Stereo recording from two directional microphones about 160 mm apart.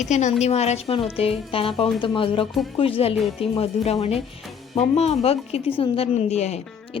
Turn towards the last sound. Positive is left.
turn(degrees=45)  # may be behind; listen again after turning